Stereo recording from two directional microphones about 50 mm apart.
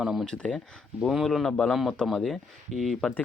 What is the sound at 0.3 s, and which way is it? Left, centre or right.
Speech, centre.